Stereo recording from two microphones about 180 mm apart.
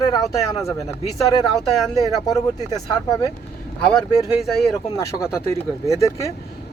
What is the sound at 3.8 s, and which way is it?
Speech, 5° left (ahead or behind).